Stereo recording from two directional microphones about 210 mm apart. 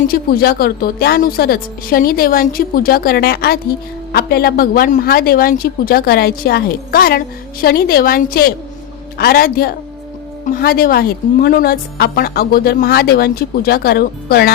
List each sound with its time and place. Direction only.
0.1 s a woman's voice: 45° left (ahead or behind)